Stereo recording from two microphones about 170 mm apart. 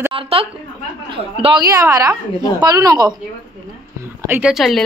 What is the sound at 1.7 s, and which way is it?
A woman's voice, 20° right (ahead or behind).